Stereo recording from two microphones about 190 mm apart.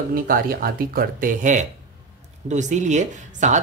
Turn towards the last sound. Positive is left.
turn(degrees=-40)  # may be behind; listen again after turning